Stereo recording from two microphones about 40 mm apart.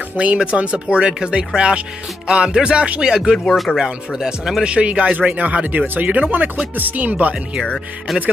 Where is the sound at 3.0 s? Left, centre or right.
Centre.